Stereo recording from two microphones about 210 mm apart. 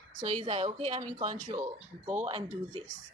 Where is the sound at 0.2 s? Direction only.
30° right (ahead or behind).